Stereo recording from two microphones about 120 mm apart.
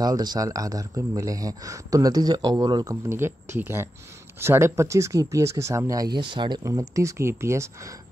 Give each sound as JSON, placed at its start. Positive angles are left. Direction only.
{"t": 0.0, "sound": "speech", "side_deg": -35}
{"t": 6.1, "sound": "speech", "side_deg": -40}
{"t": 6.6, "sound": "speech", "side_deg": -25}